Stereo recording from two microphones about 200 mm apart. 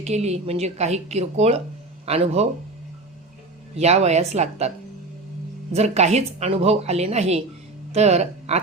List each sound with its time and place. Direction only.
0.0 s a woman's voice: 35° right (ahead or behind)
3.8 s a woman's voice: 35° right (ahead or behind)
5.7 s a woman's voice: 30° right (ahead or behind)